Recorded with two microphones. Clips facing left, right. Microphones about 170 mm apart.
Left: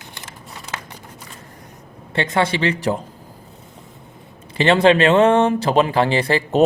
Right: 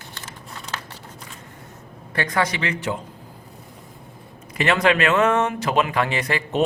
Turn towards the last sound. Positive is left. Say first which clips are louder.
# left 6 dB
turn(degrees=30)  # may be behind; listen again after turning